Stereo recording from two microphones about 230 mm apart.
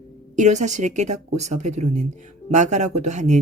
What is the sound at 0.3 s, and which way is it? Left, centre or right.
Speech, right.